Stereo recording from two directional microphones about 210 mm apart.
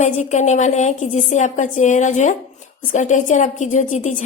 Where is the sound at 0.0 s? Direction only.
35° left (ahead or behind).